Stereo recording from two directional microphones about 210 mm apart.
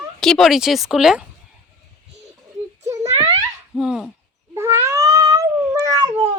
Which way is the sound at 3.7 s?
Centre (ahead or behind).